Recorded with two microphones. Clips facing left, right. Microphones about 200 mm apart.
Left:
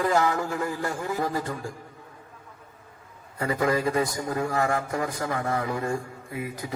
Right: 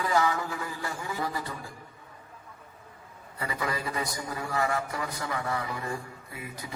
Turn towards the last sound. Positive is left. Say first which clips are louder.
# left 8 dB
turn(degrees=50)  # may be behind; listen again after turning